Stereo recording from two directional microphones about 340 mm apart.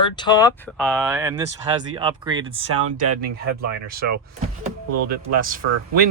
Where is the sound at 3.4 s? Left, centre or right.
Right.